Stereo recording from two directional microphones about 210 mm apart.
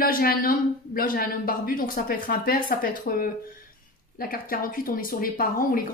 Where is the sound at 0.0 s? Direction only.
45° left (ahead or behind).